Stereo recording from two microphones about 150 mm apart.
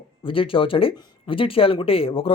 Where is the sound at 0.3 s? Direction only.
35° left (ahead or behind).